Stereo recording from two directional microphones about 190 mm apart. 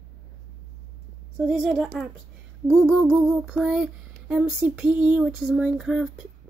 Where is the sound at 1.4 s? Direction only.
Centre (ahead or behind).